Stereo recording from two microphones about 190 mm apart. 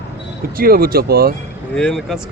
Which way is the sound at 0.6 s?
50° right (ahead or behind).